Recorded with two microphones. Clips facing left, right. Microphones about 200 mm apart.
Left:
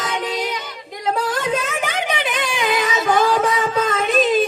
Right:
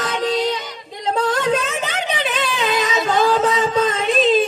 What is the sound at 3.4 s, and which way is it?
Music, 25° right (ahead or behind).